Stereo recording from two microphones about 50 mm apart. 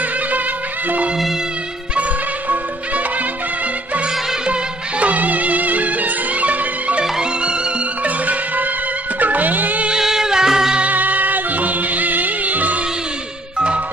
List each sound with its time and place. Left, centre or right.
0.8 s music: right
5.0 s music: right
9.8 s music: centre
10.8 s music: right